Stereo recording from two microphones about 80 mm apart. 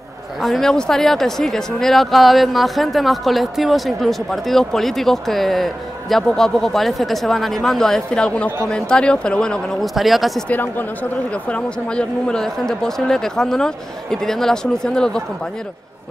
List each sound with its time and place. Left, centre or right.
0.4 s speech: centre
9.9 s speech: centre
10.5 s speech: left
11.4 s speech: centre